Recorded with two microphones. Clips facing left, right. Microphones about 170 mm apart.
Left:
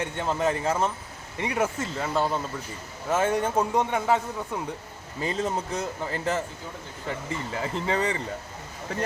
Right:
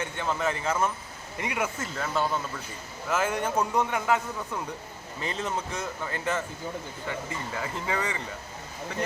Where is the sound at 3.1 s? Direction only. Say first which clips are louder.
Left 3 dB; 30° left (ahead or behind).